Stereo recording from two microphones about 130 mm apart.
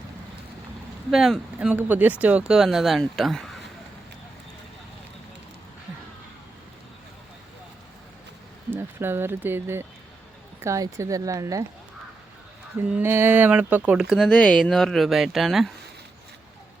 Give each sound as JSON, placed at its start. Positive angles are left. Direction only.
{"t": 1.1, "sound": "speech", "side_deg": 0}
{"t": 8.7, "sound": "speech", "side_deg": -15}
{"t": 12.8, "sound": "speech", "side_deg": -15}
{"t": 14.3, "sound": "speech", "side_deg": 10}